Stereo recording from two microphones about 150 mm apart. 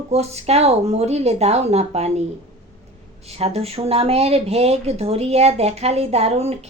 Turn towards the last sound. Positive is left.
turn(degrees=-45)  # may be behind; listen again after turning